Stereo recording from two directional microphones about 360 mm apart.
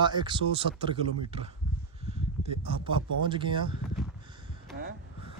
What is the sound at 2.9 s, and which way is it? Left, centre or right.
Speech, centre.